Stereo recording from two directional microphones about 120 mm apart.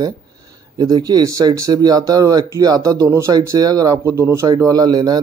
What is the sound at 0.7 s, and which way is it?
Speech, 30° right (ahead or behind).